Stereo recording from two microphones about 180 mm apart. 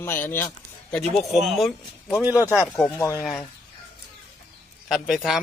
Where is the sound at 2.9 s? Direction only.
15° left (ahead or behind).